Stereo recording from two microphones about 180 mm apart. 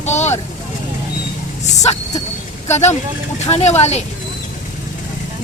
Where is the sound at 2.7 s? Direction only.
40° left (ahead or behind).